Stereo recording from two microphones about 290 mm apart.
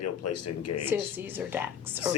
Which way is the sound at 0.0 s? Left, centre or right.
Left.